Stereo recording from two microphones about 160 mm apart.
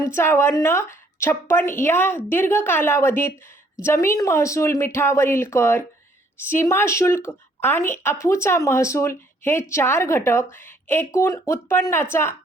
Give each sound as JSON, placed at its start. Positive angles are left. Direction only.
{"t": 0.0, "sound": "speech", "side_deg": 15}